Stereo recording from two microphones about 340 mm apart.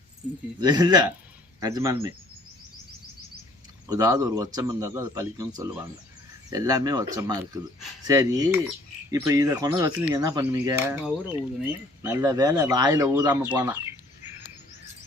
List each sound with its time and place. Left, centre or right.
0.6 s speech: centre
3.8 s speech: centre